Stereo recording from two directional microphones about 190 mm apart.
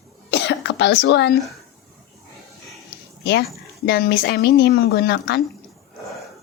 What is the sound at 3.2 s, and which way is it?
Speech, 60° left (ahead or behind).